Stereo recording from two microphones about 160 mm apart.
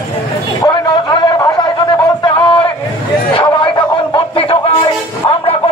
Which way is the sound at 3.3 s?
30° left (ahead or behind).